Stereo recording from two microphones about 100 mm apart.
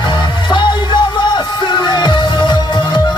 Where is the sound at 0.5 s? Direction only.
50° left (ahead or behind).